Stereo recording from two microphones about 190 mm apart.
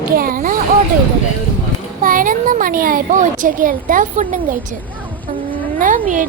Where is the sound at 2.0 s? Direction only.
45° right (ahead or behind).